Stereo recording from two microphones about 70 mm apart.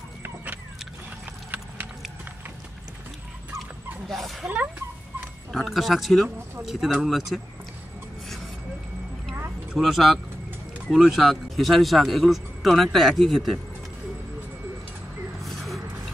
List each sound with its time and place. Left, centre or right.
4.1 s speech: centre
4.5 s speech: right
5.5 s speech: centre
9.8 s speech: centre
15.4 s vehicle: centre